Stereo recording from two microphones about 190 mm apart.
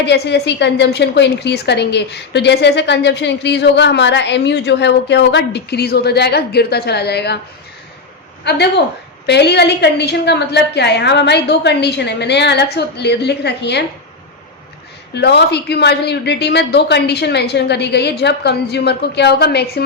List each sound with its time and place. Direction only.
0.0 s a woman's voice: 65° left (ahead or behind)
8.4 s a woman's voice: 60° left (ahead or behind)
15.1 s a woman's voice: 60° left (ahead or behind)